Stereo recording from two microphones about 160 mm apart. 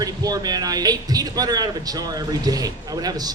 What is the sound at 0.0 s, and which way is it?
Speech, 25° right (ahead or behind).